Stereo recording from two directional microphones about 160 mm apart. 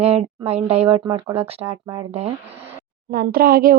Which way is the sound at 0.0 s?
40° right (ahead or behind).